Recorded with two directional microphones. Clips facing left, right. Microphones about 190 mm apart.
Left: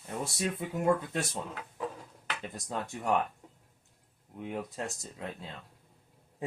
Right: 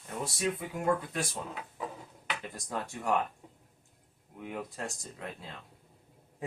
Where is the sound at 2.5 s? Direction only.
20° left (ahead or behind).